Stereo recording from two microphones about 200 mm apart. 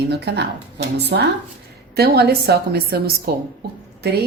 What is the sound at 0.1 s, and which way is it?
A woman's voice, 55° right (ahead or behind).